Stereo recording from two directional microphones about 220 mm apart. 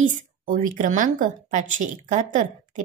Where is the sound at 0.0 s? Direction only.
35° right (ahead or behind).